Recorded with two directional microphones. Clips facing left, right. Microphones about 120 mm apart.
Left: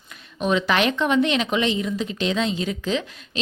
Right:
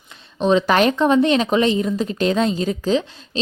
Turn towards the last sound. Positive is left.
turn(degrees=-35)  # may be behind; listen again after turning